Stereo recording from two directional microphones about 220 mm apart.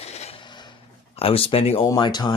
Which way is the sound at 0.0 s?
30° left (ahead or behind).